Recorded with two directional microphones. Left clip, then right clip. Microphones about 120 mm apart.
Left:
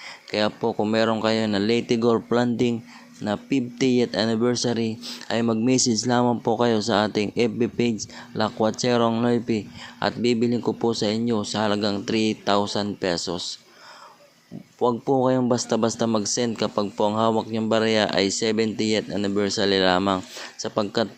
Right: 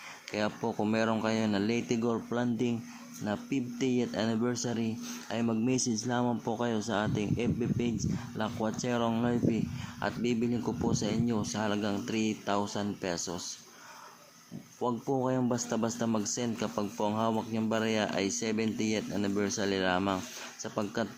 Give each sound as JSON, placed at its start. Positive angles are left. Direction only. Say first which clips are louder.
{"t": 0.3, "sound": "speech", "louder": "left 9 dB", "side_deg": 15}
{"t": 2.1, "sound": "speech", "louder": "left 11 dB", "side_deg": 30}
{"t": 14.8, "sound": "speech", "louder": "left 10 dB", "side_deg": 20}